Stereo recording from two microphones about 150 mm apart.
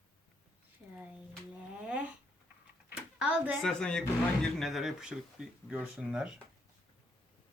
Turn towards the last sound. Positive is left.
turn(degrees=-5)  # may be behind; listen again after turning